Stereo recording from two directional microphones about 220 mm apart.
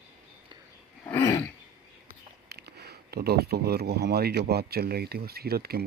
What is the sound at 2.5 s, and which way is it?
Speech, 45° right (ahead or behind).